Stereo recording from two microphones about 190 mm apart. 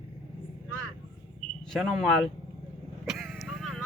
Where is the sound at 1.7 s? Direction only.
Centre (ahead or behind).